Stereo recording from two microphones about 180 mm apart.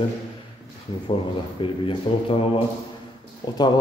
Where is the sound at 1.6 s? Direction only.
30° left (ahead or behind).